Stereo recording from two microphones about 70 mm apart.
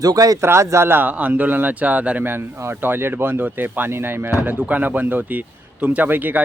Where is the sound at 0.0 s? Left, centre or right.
Right.